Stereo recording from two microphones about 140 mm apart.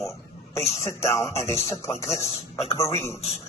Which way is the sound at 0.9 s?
20° left (ahead or behind).